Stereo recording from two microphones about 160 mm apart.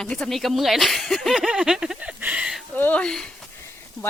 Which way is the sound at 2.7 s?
10° left (ahead or behind).